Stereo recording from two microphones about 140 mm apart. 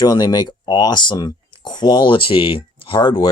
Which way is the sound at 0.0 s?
30° left (ahead or behind).